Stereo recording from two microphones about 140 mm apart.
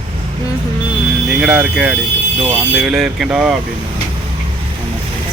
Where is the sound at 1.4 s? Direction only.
10° right (ahead or behind).